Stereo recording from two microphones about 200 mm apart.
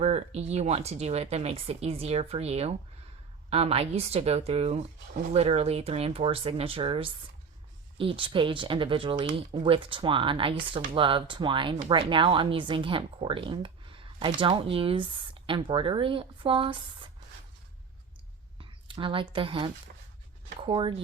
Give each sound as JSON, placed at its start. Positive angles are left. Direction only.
{"t": 0.0, "sound": "speech", "side_deg": -35}
{"t": 18.9, "sound": "speech", "side_deg": -25}